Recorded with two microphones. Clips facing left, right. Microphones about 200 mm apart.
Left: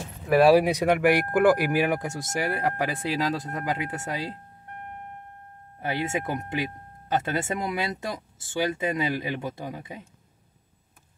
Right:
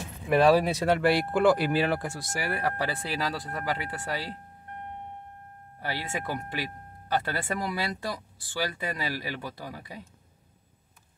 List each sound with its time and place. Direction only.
0.3 s speech: 10° left (ahead or behind)
5.8 s speech: 20° left (ahead or behind)